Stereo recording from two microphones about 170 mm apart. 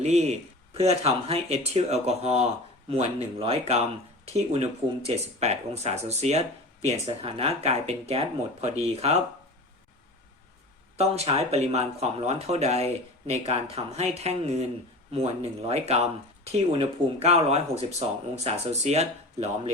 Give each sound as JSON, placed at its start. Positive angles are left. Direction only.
{"t": 0.0, "sound": "speech", "side_deg": -40}
{"t": 10.9, "sound": "speech", "side_deg": -40}